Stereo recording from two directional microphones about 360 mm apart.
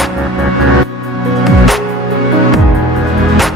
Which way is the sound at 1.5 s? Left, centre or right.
Centre.